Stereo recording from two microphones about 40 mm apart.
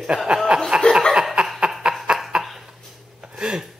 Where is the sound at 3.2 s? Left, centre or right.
Right.